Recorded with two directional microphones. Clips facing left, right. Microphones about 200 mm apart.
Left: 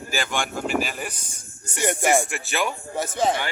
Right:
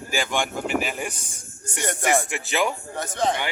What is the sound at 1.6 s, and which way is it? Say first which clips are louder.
Speech: left 3 dB; 10° left (ahead or behind).